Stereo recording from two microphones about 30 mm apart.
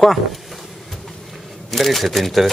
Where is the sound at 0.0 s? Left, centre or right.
Centre.